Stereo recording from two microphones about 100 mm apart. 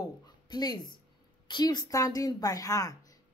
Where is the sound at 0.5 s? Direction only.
45° left (ahead or behind).